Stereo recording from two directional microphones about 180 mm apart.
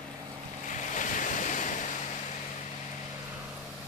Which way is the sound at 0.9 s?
45° left (ahead or behind).